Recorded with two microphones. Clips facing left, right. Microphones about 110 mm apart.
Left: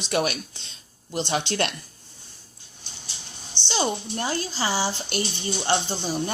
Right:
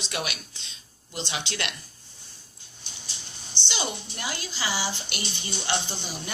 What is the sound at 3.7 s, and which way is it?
Speech, 30° left (ahead or behind).